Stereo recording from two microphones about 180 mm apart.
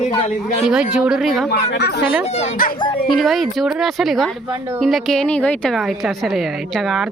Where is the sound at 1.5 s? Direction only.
65° left (ahead or behind).